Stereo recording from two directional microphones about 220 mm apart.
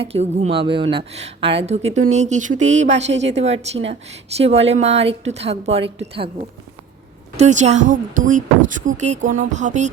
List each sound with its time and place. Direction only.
0.0 s speech: 25° right (ahead or behind)
7.3 s speech: 30° right (ahead or behind)